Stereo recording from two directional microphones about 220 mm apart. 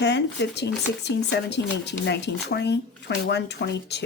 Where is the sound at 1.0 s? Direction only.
50° left (ahead or behind).